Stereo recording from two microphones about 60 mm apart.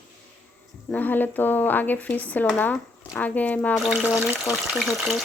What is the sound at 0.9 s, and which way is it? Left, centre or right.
Speech, left.